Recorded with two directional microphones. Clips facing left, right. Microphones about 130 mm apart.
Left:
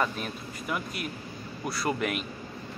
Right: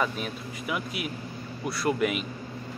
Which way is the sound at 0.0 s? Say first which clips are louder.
Right 1 dB; 5° right (ahead or behind).